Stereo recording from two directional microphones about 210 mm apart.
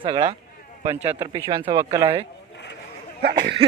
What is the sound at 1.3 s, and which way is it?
Speech, 20° right (ahead or behind).